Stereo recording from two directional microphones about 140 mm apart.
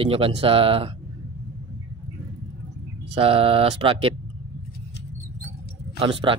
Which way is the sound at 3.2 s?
45° right (ahead or behind).